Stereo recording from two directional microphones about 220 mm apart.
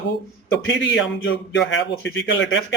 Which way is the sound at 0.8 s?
55° left (ahead or behind).